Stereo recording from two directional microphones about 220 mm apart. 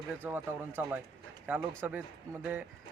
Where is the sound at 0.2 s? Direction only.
10° right (ahead or behind).